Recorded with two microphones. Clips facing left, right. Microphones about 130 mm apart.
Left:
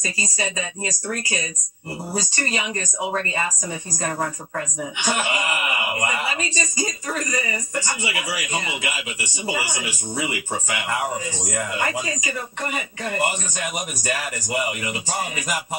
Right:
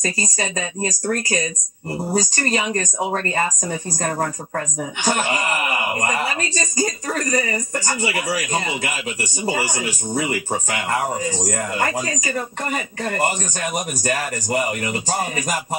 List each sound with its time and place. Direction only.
0.8 s a man's voice: 45° right (ahead or behind)
5.0 s a man's voice: 45° right (ahead or behind)